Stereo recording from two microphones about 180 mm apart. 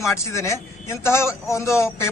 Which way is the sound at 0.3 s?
15° left (ahead or behind).